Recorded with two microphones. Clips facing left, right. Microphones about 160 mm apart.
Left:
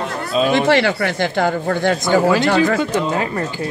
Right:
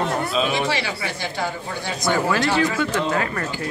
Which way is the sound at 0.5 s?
60° left (ahead or behind).